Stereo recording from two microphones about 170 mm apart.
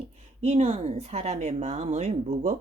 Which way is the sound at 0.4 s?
40° right (ahead or behind).